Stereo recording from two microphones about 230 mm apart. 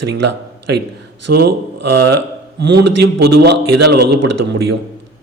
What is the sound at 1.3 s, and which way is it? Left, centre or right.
A man's voice, right.